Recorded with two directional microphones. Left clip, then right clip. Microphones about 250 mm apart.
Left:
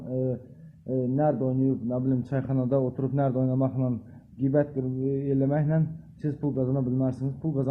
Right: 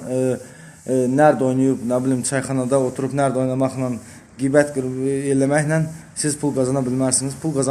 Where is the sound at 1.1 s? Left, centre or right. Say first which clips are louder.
Right 11 dB; centre.